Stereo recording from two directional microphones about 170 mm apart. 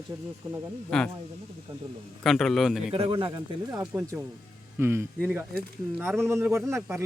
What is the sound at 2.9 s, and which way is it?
Speech, 35° right (ahead or behind).